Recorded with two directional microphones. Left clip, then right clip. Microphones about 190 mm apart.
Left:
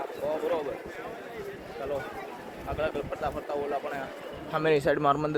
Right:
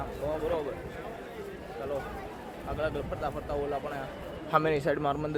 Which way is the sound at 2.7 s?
10° right (ahead or behind).